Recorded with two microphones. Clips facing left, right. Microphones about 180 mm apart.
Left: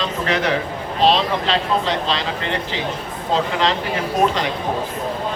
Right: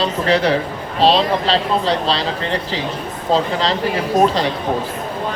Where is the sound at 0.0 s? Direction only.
35° right (ahead or behind).